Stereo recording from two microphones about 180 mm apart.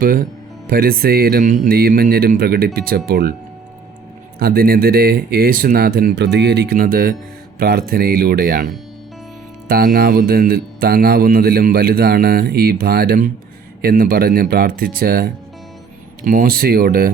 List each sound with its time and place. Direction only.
0.0 s speech: 50° right (ahead or behind)
4.4 s speech: 55° right (ahead or behind)
9.6 s speech: 55° right (ahead or behind)